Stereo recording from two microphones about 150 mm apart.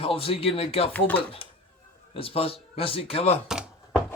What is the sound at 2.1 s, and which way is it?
Speech, 40° left (ahead or behind).